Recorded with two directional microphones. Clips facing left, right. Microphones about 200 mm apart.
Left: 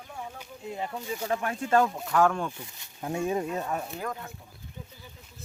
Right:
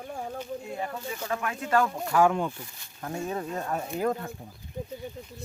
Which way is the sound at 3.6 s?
Centre (ahead or behind).